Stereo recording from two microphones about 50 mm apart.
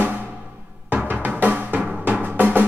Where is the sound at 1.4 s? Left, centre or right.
Right.